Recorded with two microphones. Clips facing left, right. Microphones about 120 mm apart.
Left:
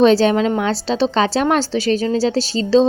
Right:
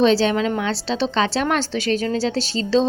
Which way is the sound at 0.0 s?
45° left (ahead or behind).